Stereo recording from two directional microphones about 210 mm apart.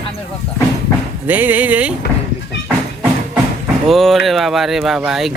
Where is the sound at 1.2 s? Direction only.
10° right (ahead or behind).